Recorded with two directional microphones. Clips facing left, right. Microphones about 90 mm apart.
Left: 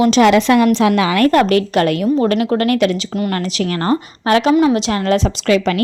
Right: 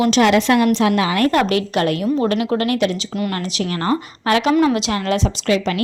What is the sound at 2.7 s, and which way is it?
Speech, 65° left (ahead or behind).